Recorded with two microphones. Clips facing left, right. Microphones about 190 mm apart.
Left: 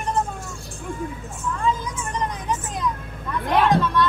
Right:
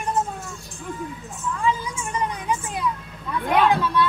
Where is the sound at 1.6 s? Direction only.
5° right (ahead or behind).